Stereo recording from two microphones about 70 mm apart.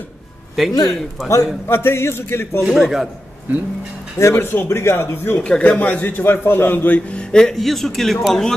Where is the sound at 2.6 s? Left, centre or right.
Centre.